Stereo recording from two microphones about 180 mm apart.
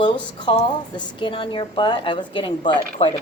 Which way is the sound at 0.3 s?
25° left (ahead or behind).